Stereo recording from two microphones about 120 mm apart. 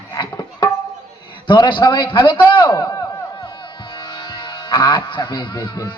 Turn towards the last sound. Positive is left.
turn(degrees=35)  # may be behind; listen again after turning